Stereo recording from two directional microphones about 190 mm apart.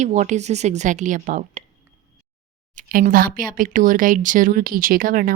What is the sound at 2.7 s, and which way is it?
Speech, 45° right (ahead or behind).